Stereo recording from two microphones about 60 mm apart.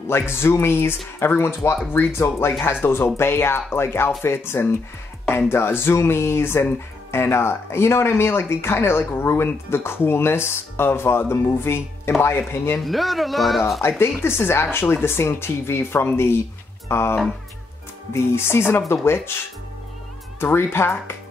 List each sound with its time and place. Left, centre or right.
0.1 s speech: left
12.8 s speech: centre
13.7 s speech: left
18.1 s speech: left
20.3 s speech: left